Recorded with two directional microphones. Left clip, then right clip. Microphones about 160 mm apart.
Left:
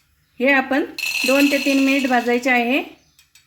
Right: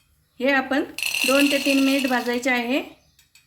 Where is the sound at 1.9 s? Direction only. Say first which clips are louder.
Left 4 dB; 40° left (ahead or behind).